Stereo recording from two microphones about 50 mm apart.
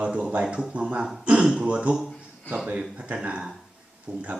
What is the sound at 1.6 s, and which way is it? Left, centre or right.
Speech, right.